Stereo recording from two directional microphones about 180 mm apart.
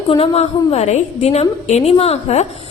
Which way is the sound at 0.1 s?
35° left (ahead or behind).